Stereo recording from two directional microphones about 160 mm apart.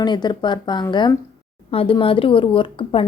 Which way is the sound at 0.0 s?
25° left (ahead or behind).